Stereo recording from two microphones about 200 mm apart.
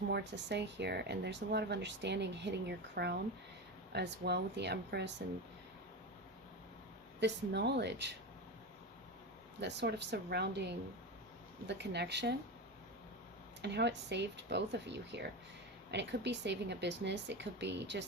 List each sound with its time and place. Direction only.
0.1 s speech: 60° right (ahead or behind)
7.2 s speech: 60° right (ahead or behind)
9.6 s speech: 60° right (ahead or behind)
13.6 s speech: 60° right (ahead or behind)